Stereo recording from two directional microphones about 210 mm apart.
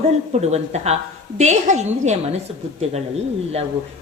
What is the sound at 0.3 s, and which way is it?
Speech, 30° right (ahead or behind).